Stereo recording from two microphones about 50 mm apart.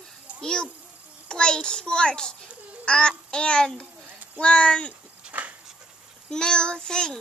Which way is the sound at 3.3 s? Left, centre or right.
Centre.